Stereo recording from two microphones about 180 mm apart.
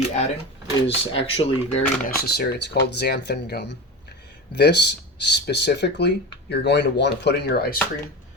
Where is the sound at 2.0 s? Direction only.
60° left (ahead or behind).